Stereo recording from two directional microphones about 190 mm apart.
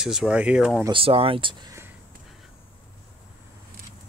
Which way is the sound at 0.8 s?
30° right (ahead or behind).